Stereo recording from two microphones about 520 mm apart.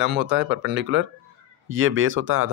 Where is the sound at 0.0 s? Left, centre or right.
Centre.